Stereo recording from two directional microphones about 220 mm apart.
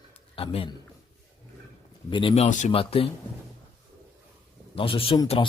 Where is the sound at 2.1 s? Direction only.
25° left (ahead or behind).